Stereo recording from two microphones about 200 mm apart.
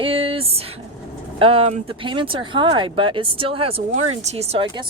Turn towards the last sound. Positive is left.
turn(degrees=-30)  # may be behind; listen again after turning